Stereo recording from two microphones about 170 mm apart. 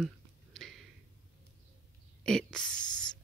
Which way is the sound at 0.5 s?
Centre (ahead or behind).